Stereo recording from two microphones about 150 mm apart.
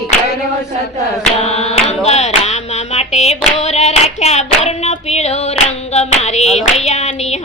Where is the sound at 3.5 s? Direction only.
50° left (ahead or behind).